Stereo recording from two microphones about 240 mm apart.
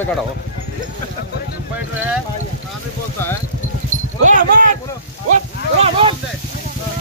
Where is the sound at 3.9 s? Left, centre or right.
Right.